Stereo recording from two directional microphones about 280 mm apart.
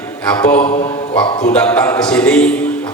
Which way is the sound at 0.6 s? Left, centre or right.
Centre.